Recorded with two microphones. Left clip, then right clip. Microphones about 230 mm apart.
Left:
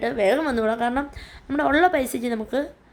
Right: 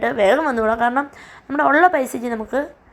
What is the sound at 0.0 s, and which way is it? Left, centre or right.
A woman's voice, centre.